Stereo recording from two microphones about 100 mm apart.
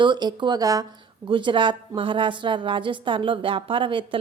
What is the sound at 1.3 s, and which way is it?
A woman's voice, 55° right (ahead or behind).